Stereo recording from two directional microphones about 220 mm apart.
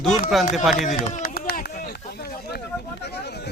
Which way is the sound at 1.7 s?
45° left (ahead or behind).